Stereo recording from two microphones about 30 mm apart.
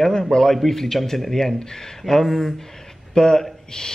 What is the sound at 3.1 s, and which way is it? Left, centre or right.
Speech, left.